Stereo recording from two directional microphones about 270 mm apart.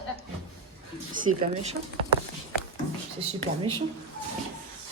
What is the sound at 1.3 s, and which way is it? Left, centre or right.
Speech, right.